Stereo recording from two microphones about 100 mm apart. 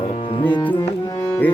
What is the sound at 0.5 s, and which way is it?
Music, 50° left (ahead or behind).